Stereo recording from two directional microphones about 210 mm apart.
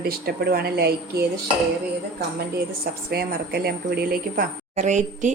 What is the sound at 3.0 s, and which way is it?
A woman's voice, 45° right (ahead or behind).